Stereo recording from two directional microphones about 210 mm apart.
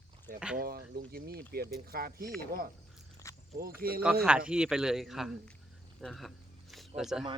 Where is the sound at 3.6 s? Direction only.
45° right (ahead or behind).